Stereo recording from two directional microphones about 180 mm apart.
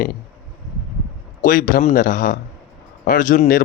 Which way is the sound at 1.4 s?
50° left (ahead or behind).